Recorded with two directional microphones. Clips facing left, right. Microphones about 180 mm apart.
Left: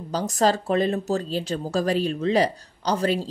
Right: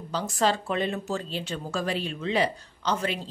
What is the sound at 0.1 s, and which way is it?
A woman's voice, 40° left (ahead or behind).